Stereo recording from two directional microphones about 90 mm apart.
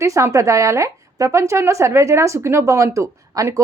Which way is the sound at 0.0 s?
35° right (ahead or behind).